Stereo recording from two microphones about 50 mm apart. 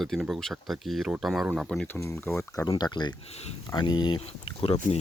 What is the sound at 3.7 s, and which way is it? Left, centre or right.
Speech, left.